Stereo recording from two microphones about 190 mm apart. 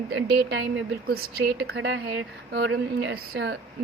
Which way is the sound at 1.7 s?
65° right (ahead or behind).